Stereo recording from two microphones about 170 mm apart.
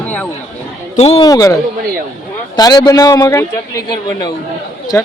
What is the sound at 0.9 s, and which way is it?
Speech, 35° left (ahead or behind).